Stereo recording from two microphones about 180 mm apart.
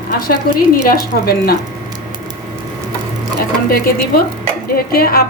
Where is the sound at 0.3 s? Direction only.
55° left (ahead or behind).